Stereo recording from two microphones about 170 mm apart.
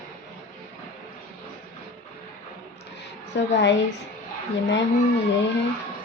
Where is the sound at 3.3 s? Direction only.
90° left.